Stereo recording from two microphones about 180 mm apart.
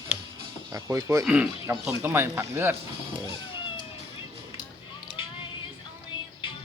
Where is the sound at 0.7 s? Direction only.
20° right (ahead or behind).